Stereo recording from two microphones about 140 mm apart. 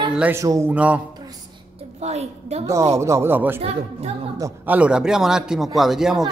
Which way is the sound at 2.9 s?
20° right (ahead or behind).